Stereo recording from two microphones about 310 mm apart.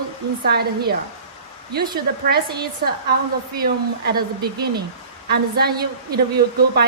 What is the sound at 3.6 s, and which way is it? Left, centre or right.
A woman's voice, right.